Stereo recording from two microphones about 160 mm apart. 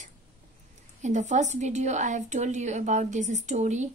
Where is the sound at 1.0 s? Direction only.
50° right (ahead or behind).